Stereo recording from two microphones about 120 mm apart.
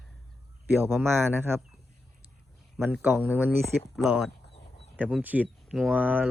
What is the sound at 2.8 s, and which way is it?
Speech, 15° right (ahead or behind).